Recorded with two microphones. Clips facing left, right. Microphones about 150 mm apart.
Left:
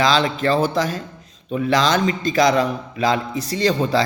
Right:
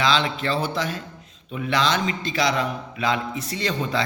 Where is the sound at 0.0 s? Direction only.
40° left (ahead or behind).